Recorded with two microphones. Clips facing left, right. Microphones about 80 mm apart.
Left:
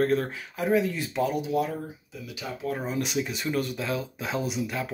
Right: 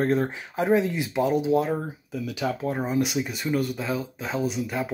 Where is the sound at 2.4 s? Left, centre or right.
Right.